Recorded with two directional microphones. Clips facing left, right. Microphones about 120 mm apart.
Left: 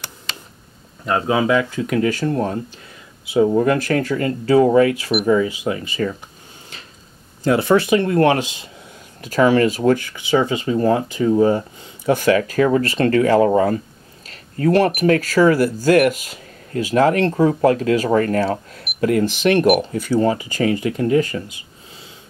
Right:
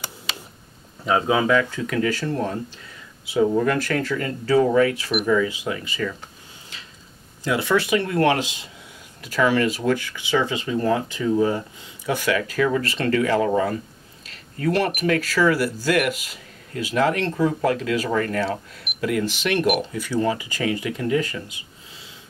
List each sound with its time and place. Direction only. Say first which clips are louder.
1.0 s speech: left 2 dB; centre (ahead or behind)
1.8 s speech: left 4 dB; 25° left (ahead or behind)
4.0 s speech: left 5 dB; 35° left (ahead or behind)
6.0 s speech: left 5 dB; 40° left (ahead or behind)
7.4 s speech: left 6 dB; 45° left (ahead or behind)
10.8 s speech: left 4 dB; 30° left (ahead or behind)
14.2 s a sound: left 5 dB; 40° left (ahead or behind)
15.0 s speech: left 6 dB; 45° left (ahead or behind)